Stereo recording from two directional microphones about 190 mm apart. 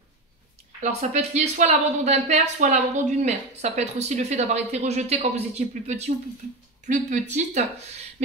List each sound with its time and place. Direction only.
1.1 s a woman's voice: 35° right (ahead or behind)